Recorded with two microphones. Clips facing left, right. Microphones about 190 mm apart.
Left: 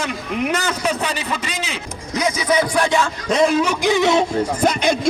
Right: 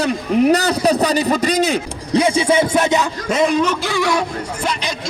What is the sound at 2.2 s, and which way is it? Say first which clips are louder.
Music: right 1 dB; 30° right (ahead or behind).